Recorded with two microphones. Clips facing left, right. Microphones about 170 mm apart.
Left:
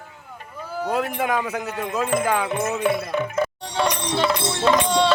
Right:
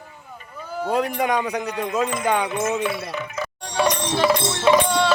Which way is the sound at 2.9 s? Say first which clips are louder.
Left 6 dB; 55° left (ahead or behind).